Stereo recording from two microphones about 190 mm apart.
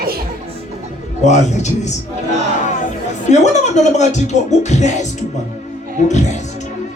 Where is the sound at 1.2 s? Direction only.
40° left (ahead or behind).